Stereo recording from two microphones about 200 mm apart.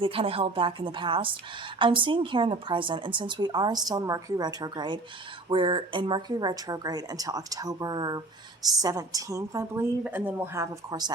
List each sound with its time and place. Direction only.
0.0 s a woman's voice: 30° right (ahead or behind)